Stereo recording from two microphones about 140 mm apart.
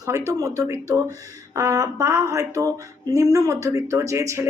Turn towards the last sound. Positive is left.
turn(degrees=-20)  # may be behind; listen again after turning